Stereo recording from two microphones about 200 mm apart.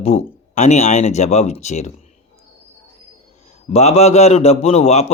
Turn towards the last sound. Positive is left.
turn(degrees=30)  # may be behind; listen again after turning